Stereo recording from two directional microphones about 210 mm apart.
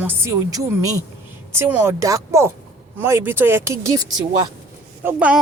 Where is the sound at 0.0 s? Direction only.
10° right (ahead or behind).